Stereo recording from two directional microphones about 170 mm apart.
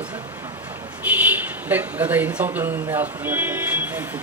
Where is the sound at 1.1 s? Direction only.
10° right (ahead or behind).